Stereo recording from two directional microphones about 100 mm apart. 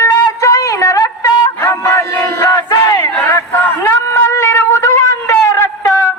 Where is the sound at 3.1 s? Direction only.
20° left (ahead or behind).